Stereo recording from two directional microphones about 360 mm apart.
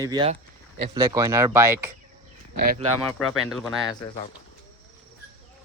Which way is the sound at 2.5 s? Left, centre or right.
Right.